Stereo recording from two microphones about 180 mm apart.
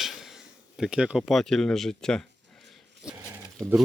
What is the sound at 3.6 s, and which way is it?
Speech, 15° right (ahead or behind).